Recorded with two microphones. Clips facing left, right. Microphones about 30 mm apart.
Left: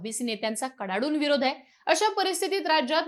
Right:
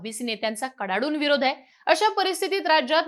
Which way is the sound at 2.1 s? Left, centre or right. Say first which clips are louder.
Right 3 dB; centre.